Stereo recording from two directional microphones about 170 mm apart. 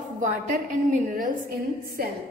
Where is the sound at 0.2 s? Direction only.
50° right (ahead or behind).